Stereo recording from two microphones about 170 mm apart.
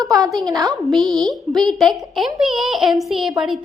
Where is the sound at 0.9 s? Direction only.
Centre (ahead or behind).